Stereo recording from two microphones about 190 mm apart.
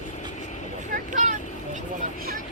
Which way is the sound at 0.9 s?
40° right (ahead or behind).